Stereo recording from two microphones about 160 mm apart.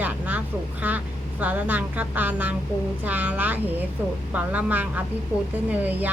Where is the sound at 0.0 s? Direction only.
10° right (ahead or behind).